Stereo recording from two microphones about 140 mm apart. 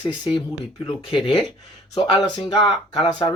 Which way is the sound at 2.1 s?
30° left (ahead or behind).